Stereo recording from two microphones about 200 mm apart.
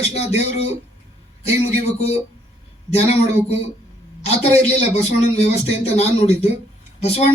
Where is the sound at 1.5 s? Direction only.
30° left (ahead or behind).